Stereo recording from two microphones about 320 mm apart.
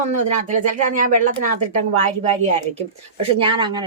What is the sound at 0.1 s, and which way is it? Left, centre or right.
Speech, right.